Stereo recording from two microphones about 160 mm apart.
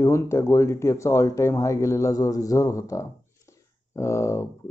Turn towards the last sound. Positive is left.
turn(degrees=15)  # may be behind; listen again after turning